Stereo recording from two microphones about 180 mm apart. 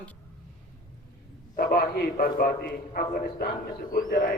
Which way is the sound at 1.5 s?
55° left (ahead or behind).